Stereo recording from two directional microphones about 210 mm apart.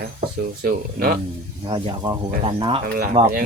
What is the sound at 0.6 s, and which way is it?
Speech, 45° right (ahead or behind).